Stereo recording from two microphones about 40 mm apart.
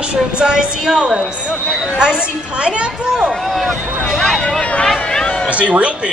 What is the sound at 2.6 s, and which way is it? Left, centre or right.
Speech, right.